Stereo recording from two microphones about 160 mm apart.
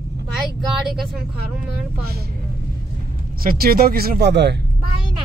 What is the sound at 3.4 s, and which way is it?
Speech, 70° right (ahead or behind).